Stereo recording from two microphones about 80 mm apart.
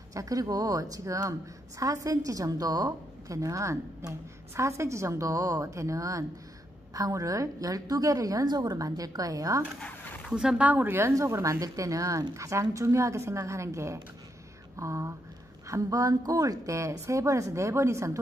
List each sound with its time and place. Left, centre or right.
0.1 s a woman's voice: right
9.8 s a sound: centre
10.3 s speech: centre
10.7 s a woman's voice: right
11.6 s a woman's voice: right